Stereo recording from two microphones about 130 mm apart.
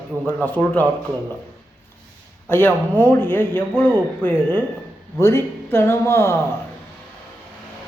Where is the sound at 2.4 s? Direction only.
15° left (ahead or behind).